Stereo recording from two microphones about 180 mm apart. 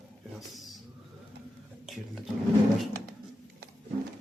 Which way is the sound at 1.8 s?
Centre (ahead or behind).